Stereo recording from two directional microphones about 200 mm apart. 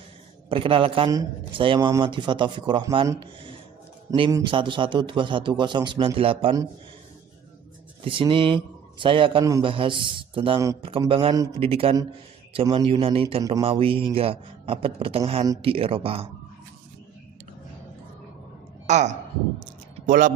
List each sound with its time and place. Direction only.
0.5 s a man's voice: 25° right (ahead or behind)
8.0 s a man's voice: 25° right (ahead or behind)
18.9 s speech: 35° right (ahead or behind)